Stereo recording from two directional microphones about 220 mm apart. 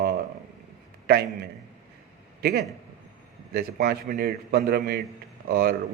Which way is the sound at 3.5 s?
45° right (ahead or behind).